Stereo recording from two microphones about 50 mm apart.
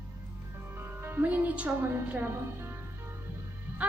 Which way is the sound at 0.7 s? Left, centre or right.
Right.